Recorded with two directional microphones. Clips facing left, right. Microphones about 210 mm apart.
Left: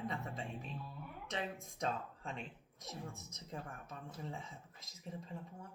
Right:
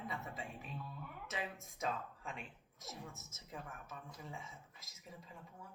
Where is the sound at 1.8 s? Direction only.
30° left (ahead or behind).